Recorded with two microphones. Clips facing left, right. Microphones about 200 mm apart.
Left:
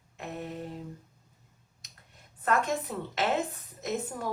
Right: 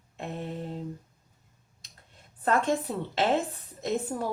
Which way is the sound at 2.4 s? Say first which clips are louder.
Right 3 dB; 30° right (ahead or behind).